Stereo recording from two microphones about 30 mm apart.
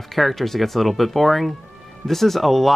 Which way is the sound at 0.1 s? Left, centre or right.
Centre.